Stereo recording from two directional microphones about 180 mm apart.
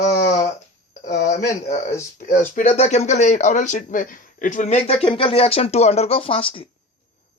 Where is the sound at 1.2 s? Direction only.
40° left (ahead or behind).